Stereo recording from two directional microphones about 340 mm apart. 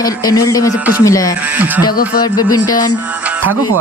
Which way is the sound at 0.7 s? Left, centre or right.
Centre.